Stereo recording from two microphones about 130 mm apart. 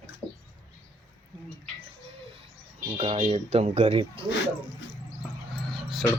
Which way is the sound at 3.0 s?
55° right (ahead or behind).